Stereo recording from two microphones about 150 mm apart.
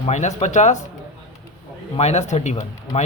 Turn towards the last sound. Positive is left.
turn(degrees=50)  # may be behind; listen again after turning